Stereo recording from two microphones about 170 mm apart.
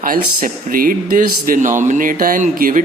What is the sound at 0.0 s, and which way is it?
Speech, 55° right (ahead or behind).